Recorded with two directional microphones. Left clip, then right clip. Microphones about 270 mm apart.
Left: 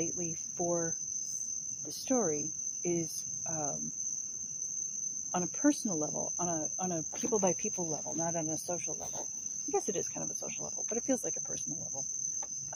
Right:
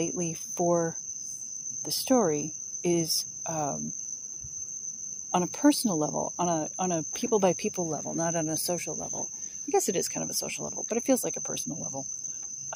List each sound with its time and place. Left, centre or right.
0.0 s speech: right
5.3 s speech: right